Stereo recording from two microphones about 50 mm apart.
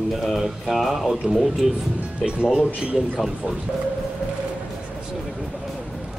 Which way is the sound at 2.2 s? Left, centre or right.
Centre.